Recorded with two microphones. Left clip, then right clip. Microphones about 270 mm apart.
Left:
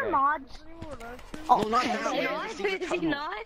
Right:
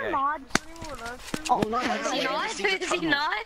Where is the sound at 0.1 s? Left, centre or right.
Centre.